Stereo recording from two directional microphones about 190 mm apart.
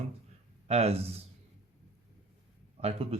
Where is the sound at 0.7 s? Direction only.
35° right (ahead or behind).